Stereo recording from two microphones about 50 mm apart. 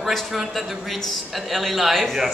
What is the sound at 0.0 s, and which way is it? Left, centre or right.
A man's voice, centre.